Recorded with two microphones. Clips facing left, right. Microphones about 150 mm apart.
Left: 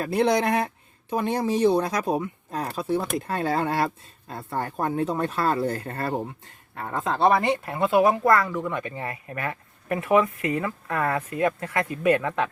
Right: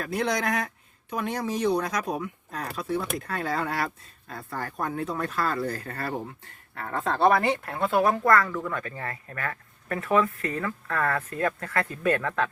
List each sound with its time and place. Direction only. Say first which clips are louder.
0.0 s speech: left 6 dB; 30° left (ahead or behind); by 7.7 s 5° left (ahead or behind)
8.2 s speech: left 2 dB; 20° left (ahead or behind)